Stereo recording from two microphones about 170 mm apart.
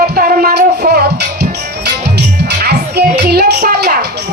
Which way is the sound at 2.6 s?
75° right (ahead or behind).